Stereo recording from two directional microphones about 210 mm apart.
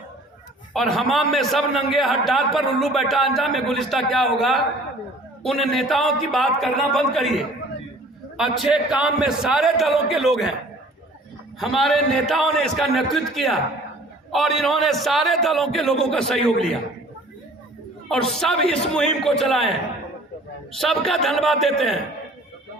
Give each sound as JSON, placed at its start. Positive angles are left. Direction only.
{"t": 0.7, "sound": "a man's voice", "side_deg": 0}
{"t": 11.6, "sound": "a man's voice", "side_deg": 0}
{"t": 18.3, "sound": "a man's voice", "side_deg": 0}
{"t": 20.7, "sound": "a man's voice", "side_deg": 0}